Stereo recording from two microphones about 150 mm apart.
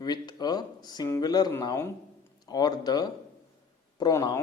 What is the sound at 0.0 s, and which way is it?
A man's voice, 25° left (ahead or behind).